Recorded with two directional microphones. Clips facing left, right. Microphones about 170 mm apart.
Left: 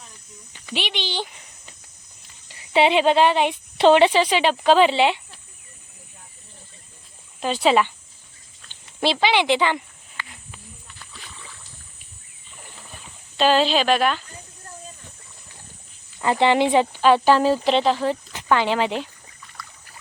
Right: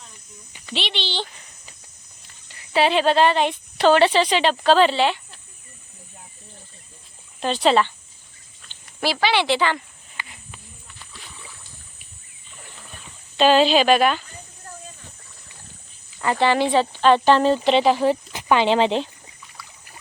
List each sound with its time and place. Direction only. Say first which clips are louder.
0.6 s speech: even; 10° left (ahead or behind)
2.5 s speech: left 1 dB; 25° left (ahead or behind)
7.3 s speech: even; 5° left (ahead or behind)
9.0 s speech: left 1 dB; 20° left (ahead or behind)
10.2 s wild animals: even; 15° right (ahead or behind)
13.3 s speech: right 3 dB; centre (ahead or behind)
16.2 s speech: left 1 dB; 20° left (ahead or behind); by 17.8 s centre (ahead or behind)
17.8 s speech: right 3 dB; 15° right (ahead or behind)
19.6 s boat: left 3 dB; 5° right (ahead or behind)